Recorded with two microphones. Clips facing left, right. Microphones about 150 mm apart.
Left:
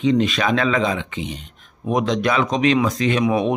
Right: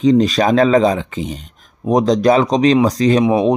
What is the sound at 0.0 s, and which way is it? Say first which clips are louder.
Speech: right 6 dB; 40° right (ahead or behind).